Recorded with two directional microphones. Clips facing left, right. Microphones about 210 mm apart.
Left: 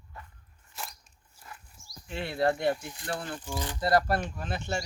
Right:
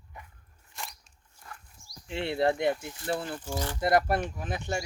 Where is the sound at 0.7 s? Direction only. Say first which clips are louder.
Even; centre (ahead or behind).